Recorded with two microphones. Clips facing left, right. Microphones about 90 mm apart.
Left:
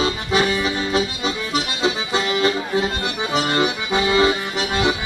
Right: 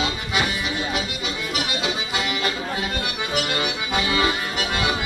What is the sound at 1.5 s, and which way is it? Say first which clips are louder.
Accordion: left 3 dB; 35° left (ahead or behind).